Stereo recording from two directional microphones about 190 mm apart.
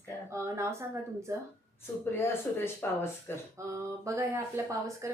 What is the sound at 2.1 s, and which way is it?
Speech, 10° left (ahead or behind).